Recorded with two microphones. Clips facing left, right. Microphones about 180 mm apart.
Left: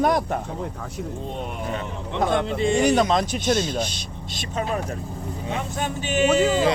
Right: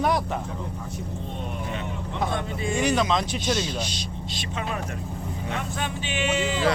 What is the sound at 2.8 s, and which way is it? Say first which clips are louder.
Speech: left 2 dB; 45° left (ahead or behind).